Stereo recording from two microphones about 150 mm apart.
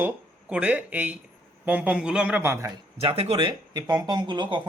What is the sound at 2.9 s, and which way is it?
Speech, 40° right (ahead or behind).